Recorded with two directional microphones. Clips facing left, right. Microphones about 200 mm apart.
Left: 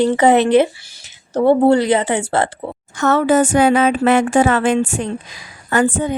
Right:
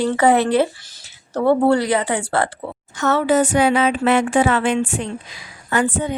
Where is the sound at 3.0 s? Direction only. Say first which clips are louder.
Left 3 dB; 50° left (ahead or behind).